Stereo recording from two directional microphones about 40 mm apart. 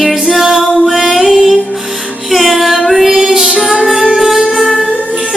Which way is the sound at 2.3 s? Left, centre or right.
Centre.